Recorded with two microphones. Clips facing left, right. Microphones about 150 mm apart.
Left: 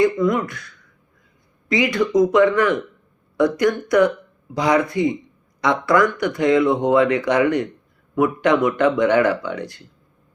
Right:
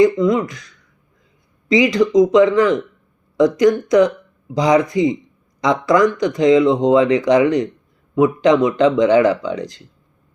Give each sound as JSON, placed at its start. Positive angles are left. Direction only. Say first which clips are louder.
{"t": 0.0, "sound": "speech", "louder": "right 4 dB", "side_deg": -15}
{"t": 1.7, "sound": "speech", "louder": "right 5 dB", "side_deg": -15}